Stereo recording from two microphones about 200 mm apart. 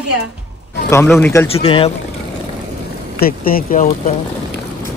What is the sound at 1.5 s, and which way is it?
Speech, 30° left (ahead or behind).